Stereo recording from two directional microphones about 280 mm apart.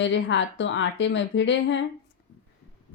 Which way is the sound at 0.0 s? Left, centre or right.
Left.